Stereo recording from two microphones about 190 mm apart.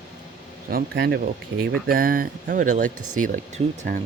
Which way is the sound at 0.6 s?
55° right (ahead or behind).